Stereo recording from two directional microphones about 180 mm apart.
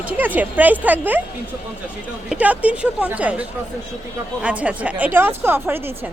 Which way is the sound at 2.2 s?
10° right (ahead or behind).